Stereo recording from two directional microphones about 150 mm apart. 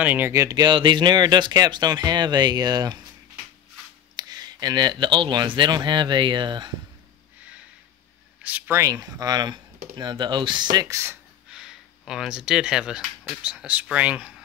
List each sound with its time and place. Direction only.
0.0 s speech: 10° right (ahead or behind)
4.2 s speech: 25° right (ahead or behind)
8.4 s speech: 10° right (ahead or behind)
11.5 s speech: 5° right (ahead or behind)